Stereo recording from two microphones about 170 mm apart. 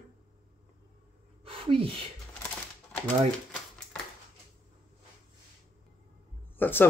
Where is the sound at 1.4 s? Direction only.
30° right (ahead or behind).